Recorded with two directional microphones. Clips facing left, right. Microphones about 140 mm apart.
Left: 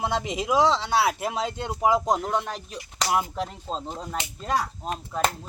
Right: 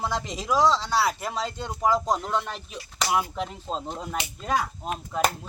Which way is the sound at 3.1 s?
Centre (ahead or behind).